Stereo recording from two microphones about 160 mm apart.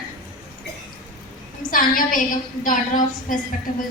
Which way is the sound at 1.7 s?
60° left (ahead or behind).